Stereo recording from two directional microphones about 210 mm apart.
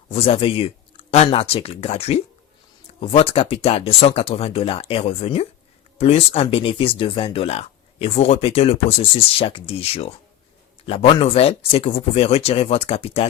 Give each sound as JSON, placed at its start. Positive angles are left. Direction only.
{"t": 0.1, "sound": "speech", "side_deg": 25}